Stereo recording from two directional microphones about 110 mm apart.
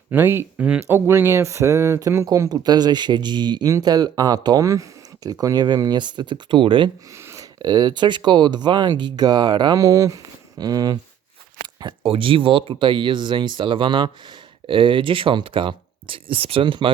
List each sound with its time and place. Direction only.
0.1 s speech: 20° right (ahead or behind); by 10.9 s 35° right (ahead or behind)
12.0 s speech: 55° right (ahead or behind)